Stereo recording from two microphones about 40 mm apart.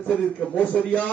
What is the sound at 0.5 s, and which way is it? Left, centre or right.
Speech, left.